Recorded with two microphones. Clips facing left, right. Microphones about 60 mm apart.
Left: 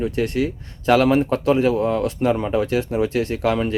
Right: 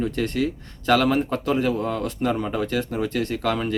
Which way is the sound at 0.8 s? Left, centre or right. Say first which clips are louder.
Left 4 dB; left.